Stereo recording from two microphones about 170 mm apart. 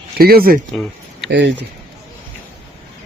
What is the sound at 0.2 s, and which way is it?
Speech, 65° right (ahead or behind).